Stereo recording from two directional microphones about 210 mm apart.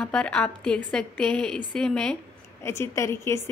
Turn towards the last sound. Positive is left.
turn(degrees=15)  # may be behind; listen again after turning